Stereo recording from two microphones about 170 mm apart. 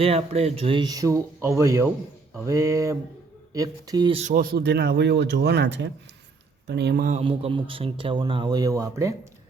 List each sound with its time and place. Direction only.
0.0 s speech: 35° right (ahead or behind)
4.2 s speech: 50° right (ahead or behind); by 7.1 s 70° right (ahead or behind)
7.1 s speech: 35° right (ahead or behind); by 9.1 s 20° right (ahead or behind)